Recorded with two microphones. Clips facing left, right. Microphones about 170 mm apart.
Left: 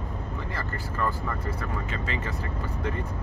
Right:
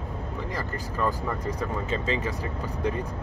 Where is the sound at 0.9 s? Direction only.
15° right (ahead or behind).